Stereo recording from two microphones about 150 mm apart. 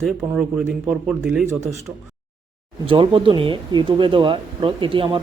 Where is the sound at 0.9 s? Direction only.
5° right (ahead or behind).